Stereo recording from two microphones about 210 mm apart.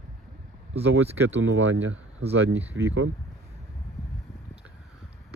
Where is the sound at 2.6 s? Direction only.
10° right (ahead or behind).